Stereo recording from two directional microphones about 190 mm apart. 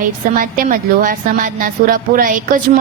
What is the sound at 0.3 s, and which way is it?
A woman's voice, 45° right (ahead or behind).